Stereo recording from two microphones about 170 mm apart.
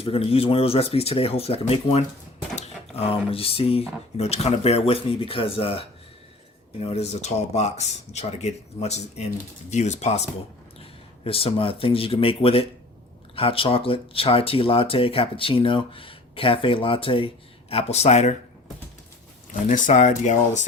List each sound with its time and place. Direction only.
0.0 s speech: 35° left (ahead or behind)
19.6 s speech: 45° left (ahead or behind)